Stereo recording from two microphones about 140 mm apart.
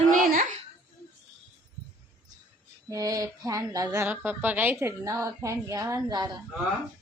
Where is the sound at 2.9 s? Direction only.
25° right (ahead or behind).